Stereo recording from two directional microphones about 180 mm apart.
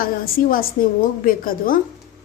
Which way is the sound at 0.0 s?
55° left (ahead or behind).